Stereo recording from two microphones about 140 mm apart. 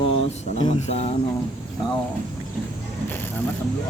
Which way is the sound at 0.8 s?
50° left (ahead or behind).